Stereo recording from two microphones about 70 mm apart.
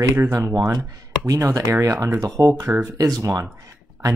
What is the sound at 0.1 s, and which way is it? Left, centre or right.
Speech, right.